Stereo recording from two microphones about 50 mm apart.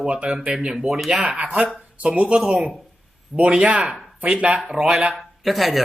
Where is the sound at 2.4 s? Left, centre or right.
Centre.